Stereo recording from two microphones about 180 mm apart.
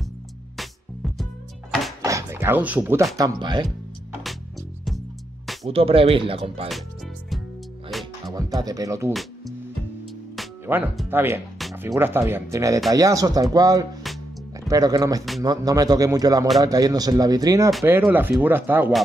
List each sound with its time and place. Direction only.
0.6 s music: centre (ahead or behind)
2.0 s speech: 15° right (ahead or behind)
3.2 s speech: 20° right (ahead or behind)
5.7 s speech: 30° right (ahead or behind)
7.9 s music: centre (ahead or behind)
8.3 s speech: 20° right (ahead or behind)
10.7 s speech: 10° right (ahead or behind)